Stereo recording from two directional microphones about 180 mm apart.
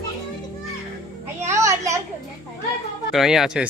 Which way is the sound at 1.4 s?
15° right (ahead or behind).